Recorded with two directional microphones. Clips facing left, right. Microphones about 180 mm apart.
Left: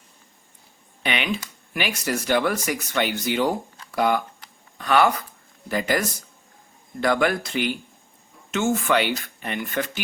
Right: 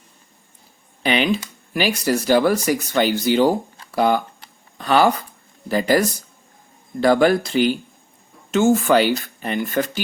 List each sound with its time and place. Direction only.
1.0 s speech: 35° right (ahead or behind)